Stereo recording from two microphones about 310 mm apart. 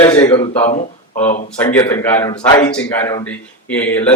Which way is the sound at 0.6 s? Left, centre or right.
Left.